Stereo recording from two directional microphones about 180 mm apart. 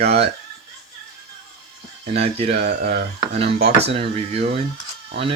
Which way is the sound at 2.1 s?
35° right (ahead or behind).